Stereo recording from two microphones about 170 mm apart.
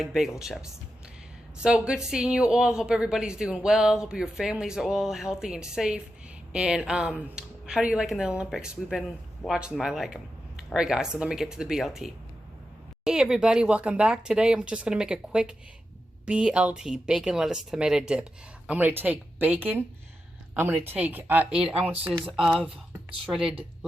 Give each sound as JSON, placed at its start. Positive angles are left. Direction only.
{"t": 0.0, "sound": "speech", "side_deg": 0}